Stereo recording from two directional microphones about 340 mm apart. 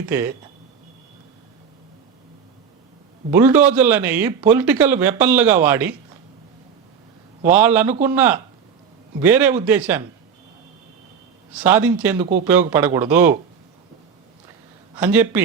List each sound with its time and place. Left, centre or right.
0.1 s a man's voice: centre
3.3 s a man's voice: centre
7.4 s a man's voice: centre
7.9 s speech: centre
8.1 s a man's voice: centre
11.5 s a man's voice: centre
14.9 s a man's voice: centre